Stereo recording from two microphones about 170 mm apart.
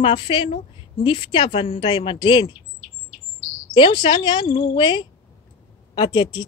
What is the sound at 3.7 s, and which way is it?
Speech, 30° left (ahead or behind).